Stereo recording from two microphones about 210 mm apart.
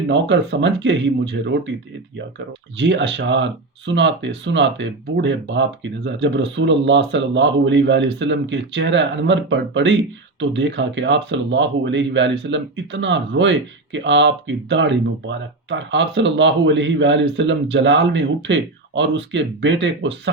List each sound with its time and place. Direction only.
0.1 s speech: 60° right (ahead or behind)
2.7 s speech: 60° right (ahead or behind)